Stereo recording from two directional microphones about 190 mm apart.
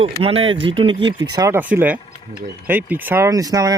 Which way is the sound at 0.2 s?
30° right (ahead or behind).